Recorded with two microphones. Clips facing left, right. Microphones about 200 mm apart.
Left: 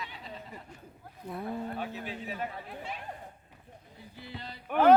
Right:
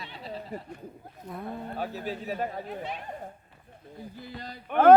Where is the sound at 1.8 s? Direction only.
40° right (ahead or behind).